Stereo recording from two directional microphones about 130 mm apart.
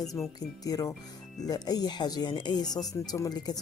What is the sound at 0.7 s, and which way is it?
Speech, 25° left (ahead or behind).